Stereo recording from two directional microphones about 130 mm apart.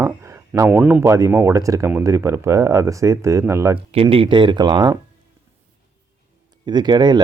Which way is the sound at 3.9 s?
45° right (ahead or behind).